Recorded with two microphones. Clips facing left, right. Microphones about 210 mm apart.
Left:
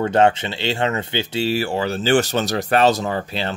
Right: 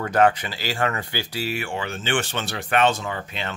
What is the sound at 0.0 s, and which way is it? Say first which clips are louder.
Speech: left 3 dB; 25° left (ahead or behind).